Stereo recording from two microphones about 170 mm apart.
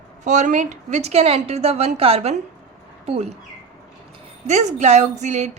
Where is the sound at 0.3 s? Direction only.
45° right (ahead or behind).